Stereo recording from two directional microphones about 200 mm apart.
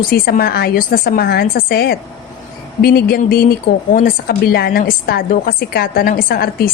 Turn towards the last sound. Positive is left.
turn(degrees=50)  # may be behind; listen again after turning